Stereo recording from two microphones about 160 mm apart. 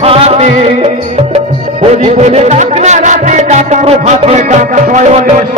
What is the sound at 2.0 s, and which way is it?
Music, 40° right (ahead or behind).